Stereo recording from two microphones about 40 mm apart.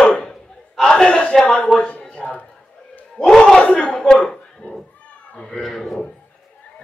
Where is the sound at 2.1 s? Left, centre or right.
Left.